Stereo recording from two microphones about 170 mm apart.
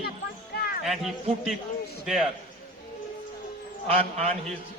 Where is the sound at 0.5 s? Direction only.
65° left (ahead or behind).